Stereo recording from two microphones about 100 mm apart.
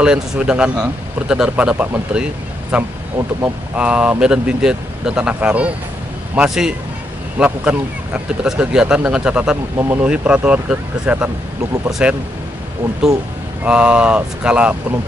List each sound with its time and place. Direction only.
0.0 s speech: 10° right (ahead or behind)
3.2 s speech: 30° right (ahead or behind)
3.7 s speech: 10° right (ahead or behind)
13.7 s speech: 10° right (ahead or behind)